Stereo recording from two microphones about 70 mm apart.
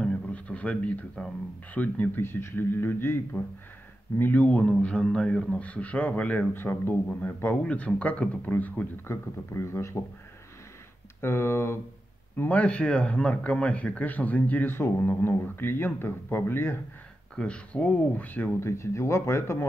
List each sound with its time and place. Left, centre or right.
0.0 s music: centre
1.7 s a man's voice: left
7.6 s a man's voice: centre
9.0 s speech: left
11.1 s speech: left
12.4 s a man's voice: left
17.4 s a man's voice: centre
18.6 s speech: left